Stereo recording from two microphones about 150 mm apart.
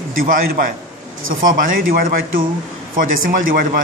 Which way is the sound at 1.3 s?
65° right (ahead or behind).